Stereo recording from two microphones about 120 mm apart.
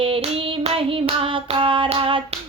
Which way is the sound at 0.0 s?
50° right (ahead or behind).